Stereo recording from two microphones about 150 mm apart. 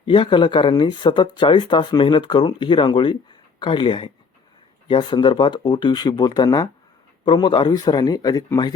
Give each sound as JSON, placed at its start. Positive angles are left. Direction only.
{"t": 0.0, "sound": "speech", "side_deg": 35}